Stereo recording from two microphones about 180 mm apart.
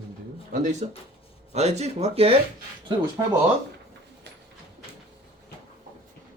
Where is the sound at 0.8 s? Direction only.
35° right (ahead or behind).